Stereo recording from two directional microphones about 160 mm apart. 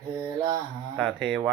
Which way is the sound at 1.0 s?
5° left (ahead or behind).